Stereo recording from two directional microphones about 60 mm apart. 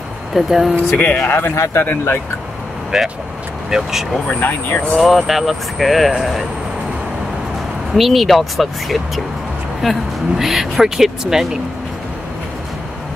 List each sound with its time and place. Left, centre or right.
0.3 s speech: centre
0.8 s speech: left
1.3 s a man's voice: left
2.9 s speech: centre
4.3 s a man's voice: left
5.0 s speech: centre
7.9 s speech: centre